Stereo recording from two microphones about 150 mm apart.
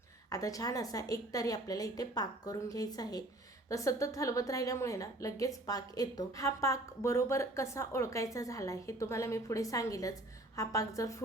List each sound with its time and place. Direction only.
0.3 s a woman's voice: 25° left (ahead or behind)